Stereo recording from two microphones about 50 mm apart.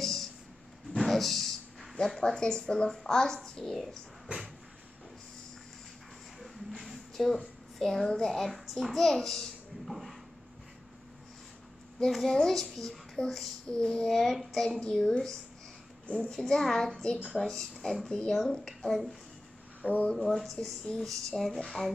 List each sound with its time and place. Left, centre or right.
0.0 s a sound: centre
2.0 s a child's voice: centre
6.8 s a sound: centre
7.8 s a child's voice: centre
12.0 s a child's voice: centre
14.8 s a child's voice: centre
19.8 s speech: right
20.2 s speech: centre